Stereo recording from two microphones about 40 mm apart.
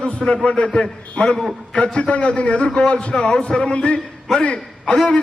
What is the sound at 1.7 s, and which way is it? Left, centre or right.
A man's voice, left.